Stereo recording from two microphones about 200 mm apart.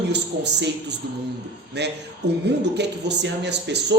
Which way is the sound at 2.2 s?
90° right.